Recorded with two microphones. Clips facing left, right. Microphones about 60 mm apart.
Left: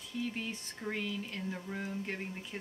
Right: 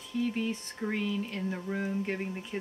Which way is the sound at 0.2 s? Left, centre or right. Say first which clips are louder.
Right 7 dB; centre.